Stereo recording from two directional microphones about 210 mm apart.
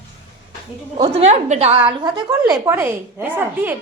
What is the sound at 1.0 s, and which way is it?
A woman's voice, 30° right (ahead or behind).